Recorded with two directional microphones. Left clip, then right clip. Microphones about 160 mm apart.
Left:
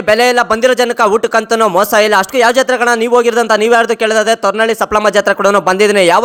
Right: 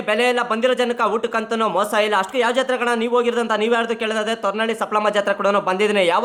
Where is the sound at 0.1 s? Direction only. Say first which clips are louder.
Left 9 dB; 40° left (ahead or behind).